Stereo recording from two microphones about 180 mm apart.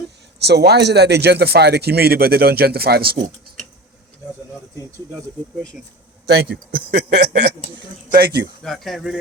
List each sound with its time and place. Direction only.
0.4 s speech: 65° right (ahead or behind)
6.2 s speech: 65° right (ahead or behind)
8.6 s speech: centre (ahead or behind)